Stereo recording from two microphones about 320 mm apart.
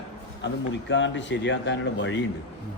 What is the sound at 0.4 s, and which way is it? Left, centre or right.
Speech, left.